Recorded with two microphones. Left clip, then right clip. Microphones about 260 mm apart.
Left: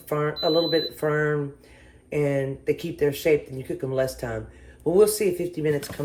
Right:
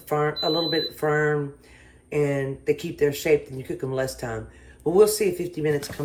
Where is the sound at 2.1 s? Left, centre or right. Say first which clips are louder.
Even; right.